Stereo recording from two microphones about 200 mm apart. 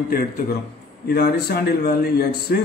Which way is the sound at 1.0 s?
50° left (ahead or behind).